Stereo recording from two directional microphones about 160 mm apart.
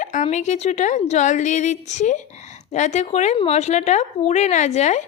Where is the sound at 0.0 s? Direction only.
50° left (ahead or behind).